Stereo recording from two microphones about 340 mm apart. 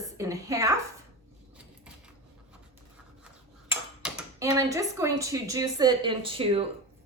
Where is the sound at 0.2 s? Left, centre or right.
Centre.